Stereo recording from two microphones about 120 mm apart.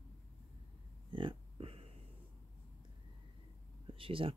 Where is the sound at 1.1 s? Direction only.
45° right (ahead or behind).